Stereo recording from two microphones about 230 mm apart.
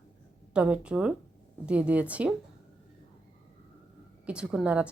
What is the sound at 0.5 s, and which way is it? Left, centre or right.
A woman's voice, centre.